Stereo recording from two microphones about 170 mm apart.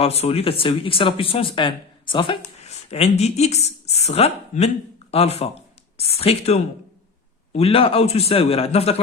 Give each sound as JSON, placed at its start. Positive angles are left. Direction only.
{"t": 0.0, "sound": "speech", "side_deg": 35}